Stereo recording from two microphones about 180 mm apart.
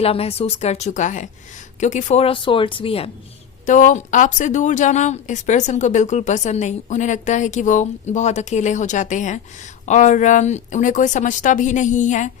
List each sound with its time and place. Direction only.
0.0 s speech: 35° left (ahead or behind)
3.7 s speech: 45° left (ahead or behind)